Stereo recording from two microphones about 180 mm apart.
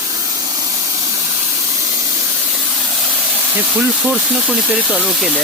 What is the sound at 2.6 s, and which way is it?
Speech, centre (ahead or behind).